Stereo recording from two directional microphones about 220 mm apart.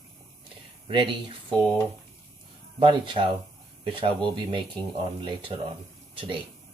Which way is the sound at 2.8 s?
20° right (ahead or behind).